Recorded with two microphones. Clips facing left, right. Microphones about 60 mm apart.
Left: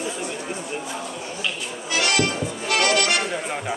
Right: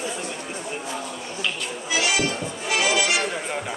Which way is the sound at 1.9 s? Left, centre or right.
Left.